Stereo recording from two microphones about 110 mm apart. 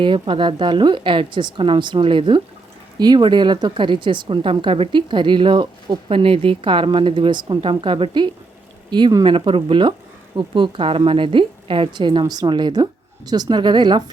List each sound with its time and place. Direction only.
0.0 s a woman's voice: 50° right (ahead or behind)
9.3 s a woman's voice: 50° right (ahead or behind)